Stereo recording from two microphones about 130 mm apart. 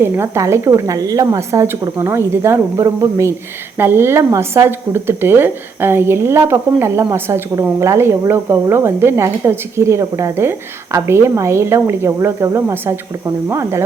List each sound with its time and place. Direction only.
0.0 s speech: 20° right (ahead or behind)